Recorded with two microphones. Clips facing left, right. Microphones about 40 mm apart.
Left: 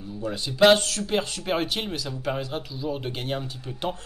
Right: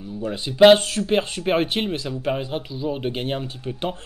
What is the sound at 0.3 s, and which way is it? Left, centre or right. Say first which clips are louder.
Speech: right 5 dB; right.